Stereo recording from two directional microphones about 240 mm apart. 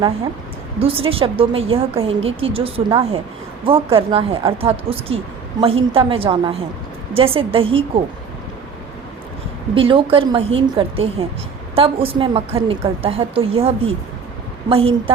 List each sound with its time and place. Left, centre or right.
0.8 s a woman's voice: right
9.7 s a woman's voice: right